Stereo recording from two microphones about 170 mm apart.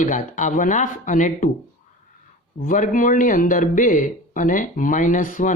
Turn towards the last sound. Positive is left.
turn(degrees=50)  # may be behind; listen again after turning